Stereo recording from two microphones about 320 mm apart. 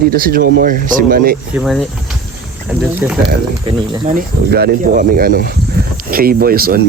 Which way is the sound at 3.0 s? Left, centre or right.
Centre.